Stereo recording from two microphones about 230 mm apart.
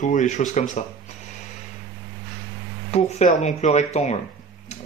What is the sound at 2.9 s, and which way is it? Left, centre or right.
Speech, left.